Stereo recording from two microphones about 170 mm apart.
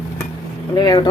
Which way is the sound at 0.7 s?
20° left (ahead or behind).